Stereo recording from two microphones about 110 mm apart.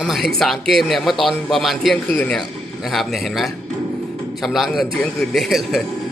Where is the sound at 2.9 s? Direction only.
Centre (ahead or behind).